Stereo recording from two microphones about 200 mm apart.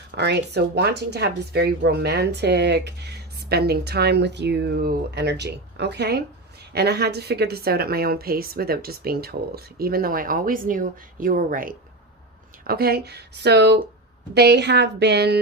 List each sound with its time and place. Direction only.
0.1 s a woman's voice: 55° right (ahead or behind)